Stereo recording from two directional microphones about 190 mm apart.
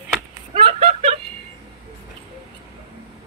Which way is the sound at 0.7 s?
35° right (ahead or behind).